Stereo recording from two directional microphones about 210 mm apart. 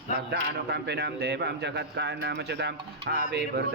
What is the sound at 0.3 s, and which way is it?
A man's voice, 50° right (ahead or behind).